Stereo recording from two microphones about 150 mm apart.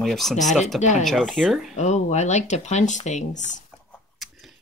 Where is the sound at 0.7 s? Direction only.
50° left (ahead or behind).